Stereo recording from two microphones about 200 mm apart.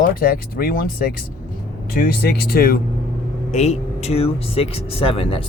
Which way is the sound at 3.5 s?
35° left (ahead or behind).